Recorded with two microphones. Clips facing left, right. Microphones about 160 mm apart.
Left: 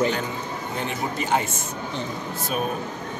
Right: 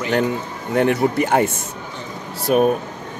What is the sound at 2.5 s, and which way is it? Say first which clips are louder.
Speech: right 12 dB; 65° right (ahead or behind).